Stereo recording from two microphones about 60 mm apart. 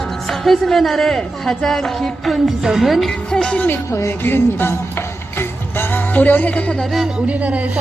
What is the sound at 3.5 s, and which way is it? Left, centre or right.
Speech, left.